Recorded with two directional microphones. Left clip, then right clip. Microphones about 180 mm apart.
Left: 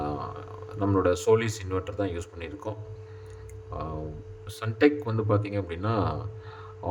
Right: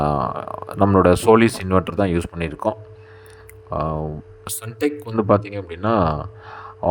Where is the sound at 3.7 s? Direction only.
45° right (ahead or behind).